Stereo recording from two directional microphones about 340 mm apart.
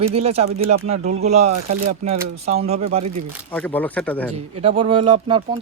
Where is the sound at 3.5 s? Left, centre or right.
Centre.